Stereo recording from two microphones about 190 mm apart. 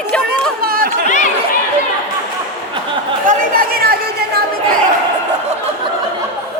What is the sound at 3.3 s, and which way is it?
Speech, 50° right (ahead or behind).